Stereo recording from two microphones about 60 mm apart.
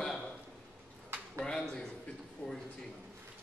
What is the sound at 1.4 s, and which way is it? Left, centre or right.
Speech, centre.